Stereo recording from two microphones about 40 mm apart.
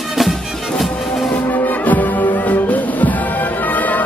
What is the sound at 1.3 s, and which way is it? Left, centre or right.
Music, left.